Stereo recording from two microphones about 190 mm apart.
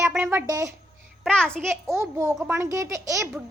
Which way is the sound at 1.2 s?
5° left (ahead or behind).